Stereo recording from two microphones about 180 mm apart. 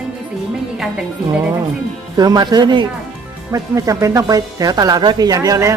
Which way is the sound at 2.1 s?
20° right (ahead or behind).